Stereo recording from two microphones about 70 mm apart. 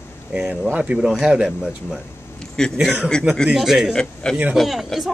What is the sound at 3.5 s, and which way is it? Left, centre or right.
A man's voice, centre.